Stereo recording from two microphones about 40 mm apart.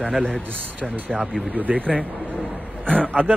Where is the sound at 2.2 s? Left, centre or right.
Right.